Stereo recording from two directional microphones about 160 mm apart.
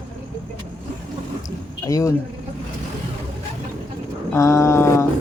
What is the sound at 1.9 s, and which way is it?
Speech, 20° left (ahead or behind).